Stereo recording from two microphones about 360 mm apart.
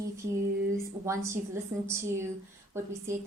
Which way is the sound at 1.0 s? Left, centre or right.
Centre.